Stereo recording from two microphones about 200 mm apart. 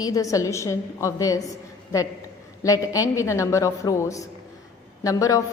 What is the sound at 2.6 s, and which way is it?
A woman's voice, 15° left (ahead or behind).